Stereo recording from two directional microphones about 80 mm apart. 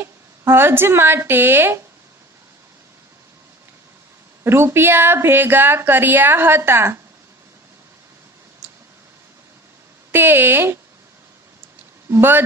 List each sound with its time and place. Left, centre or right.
0.0 s speech: right
4.4 s speech: right
10.1 s speech: right
12.1 s speech: right